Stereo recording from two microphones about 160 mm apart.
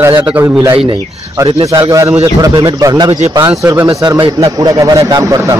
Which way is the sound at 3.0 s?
40° right (ahead or behind).